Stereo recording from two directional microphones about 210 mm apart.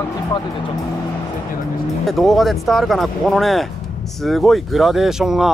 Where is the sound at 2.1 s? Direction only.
Centre (ahead or behind).